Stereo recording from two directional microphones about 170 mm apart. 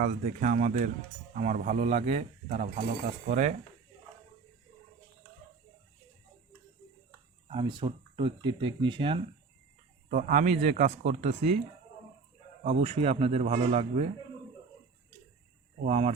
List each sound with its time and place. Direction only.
0.0 s speech: 50° right (ahead or behind)
7.4 s speech: 30° right (ahead or behind)
10.1 s speech: 50° right (ahead or behind)
12.8 s a man's voice: 35° right (ahead or behind)
15.9 s a man's voice: 40° right (ahead or behind)